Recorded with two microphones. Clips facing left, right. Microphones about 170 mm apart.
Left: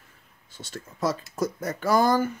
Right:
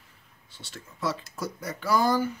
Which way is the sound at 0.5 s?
45° left (ahead or behind).